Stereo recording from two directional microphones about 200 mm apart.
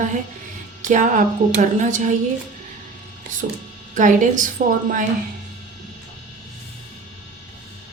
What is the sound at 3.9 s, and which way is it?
Speech, 40° right (ahead or behind).